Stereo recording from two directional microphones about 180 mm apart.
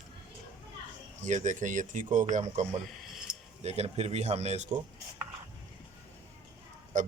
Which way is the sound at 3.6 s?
35° right (ahead or behind).